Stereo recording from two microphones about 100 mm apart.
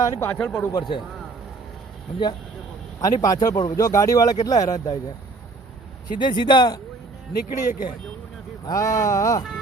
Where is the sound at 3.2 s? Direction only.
35° left (ahead or behind).